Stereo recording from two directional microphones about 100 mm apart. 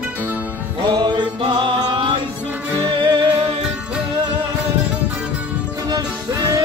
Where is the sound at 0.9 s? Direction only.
45° right (ahead or behind).